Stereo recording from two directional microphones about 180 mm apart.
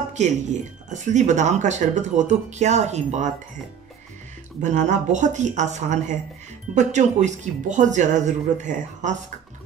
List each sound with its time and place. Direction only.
0.1 s speech: 40° right (ahead or behind)
4.6 s speech: 40° right (ahead or behind)